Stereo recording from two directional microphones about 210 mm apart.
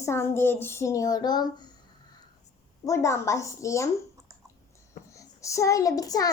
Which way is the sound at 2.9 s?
15° left (ahead or behind).